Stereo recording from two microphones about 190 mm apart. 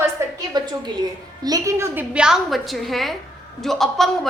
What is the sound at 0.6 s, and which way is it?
A woman's voice, 25° right (ahead or behind).